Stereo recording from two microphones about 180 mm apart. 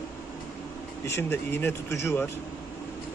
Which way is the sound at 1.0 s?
15° left (ahead or behind).